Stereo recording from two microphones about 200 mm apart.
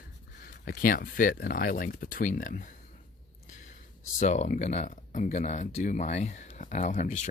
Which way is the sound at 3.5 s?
40° left (ahead or behind).